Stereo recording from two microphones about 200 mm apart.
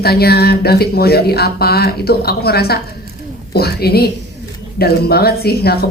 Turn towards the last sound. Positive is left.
turn(degrees=50)  # may be behind; listen again after turning